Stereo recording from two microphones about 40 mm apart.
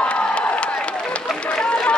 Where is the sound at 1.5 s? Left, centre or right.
Left.